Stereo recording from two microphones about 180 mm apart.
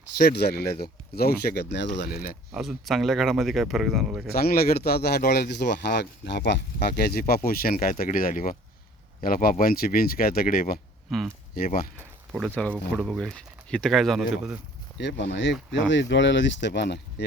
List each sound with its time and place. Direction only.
0.2 s speech: 60° left (ahead or behind)
2.0 s speech: 55° left (ahead or behind)
2.5 s speech: centre (ahead or behind)
4.3 s speech: 60° left (ahead or behind); by 6.6 s 75° left (ahead or behind)
6.8 s speech: 55° left (ahead or behind)
11.9 s a sound: 10° right (ahead or behind)
12.9 s speech: centre (ahead or behind)
14.9 s speech: 75° left (ahead or behind)